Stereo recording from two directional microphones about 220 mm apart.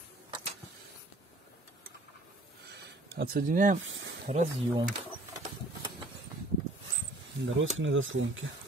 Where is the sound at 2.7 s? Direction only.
45° right (ahead or behind).